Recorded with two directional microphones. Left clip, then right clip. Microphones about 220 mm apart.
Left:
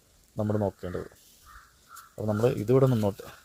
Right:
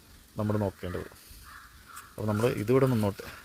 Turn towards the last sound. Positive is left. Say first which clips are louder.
# left 2 dB
turn(degrees=-5)  # may be behind; listen again after turning